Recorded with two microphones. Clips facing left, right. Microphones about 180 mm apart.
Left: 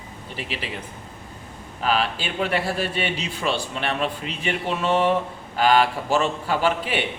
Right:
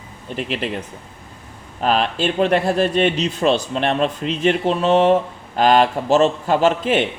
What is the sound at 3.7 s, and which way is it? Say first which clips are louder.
Speech: right 6 dB; 35° right (ahead or behind).